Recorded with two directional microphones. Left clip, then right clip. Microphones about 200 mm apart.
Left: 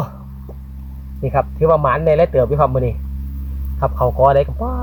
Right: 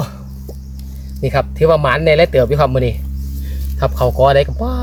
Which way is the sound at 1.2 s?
20° right (ahead or behind).